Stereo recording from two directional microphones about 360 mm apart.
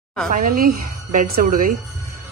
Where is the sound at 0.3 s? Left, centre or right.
Right.